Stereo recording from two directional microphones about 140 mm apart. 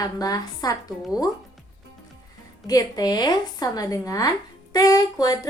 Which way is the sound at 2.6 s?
25° left (ahead or behind).